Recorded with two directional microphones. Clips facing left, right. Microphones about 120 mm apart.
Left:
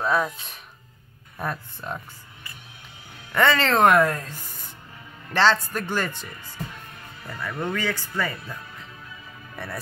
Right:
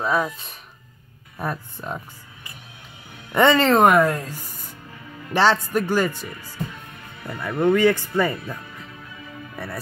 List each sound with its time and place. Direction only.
0.0 s speech: centre (ahead or behind)
3.3 s speech: 20° right (ahead or behind)
7.2 s speech: 20° right (ahead or behind)